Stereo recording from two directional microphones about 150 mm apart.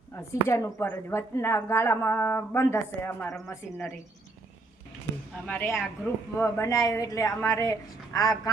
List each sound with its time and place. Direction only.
0.2 s speech: 20° left (ahead or behind)
5.5 s a woman's voice: 15° left (ahead or behind)